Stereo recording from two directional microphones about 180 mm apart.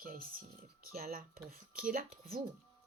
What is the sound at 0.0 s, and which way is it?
Speech, 50° right (ahead or behind).